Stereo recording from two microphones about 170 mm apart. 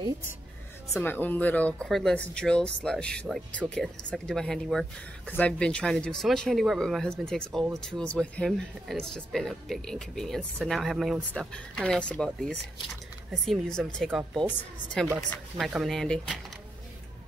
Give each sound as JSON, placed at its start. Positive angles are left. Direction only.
{"t": 0.9, "sound": "speech", "side_deg": 10}
{"t": 13.3, "sound": "speech", "side_deg": 5}
{"t": 15.2, "sound": "speech", "side_deg": 10}
{"t": 15.6, "sound": "speech", "side_deg": 0}